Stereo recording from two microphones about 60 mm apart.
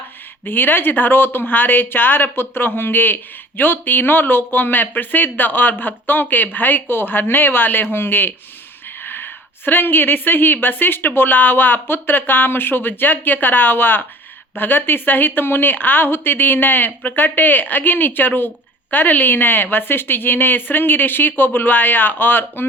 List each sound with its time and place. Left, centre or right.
0.4 s speech: left